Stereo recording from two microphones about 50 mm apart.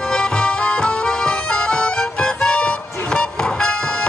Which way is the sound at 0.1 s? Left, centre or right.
Centre.